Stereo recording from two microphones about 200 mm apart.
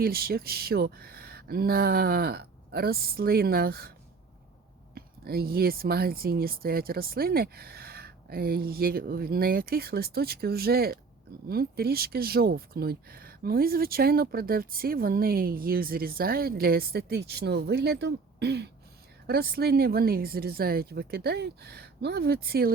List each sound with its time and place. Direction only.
0.0 s speech: 50° right (ahead or behind)
4.9 s speech: 50° right (ahead or behind)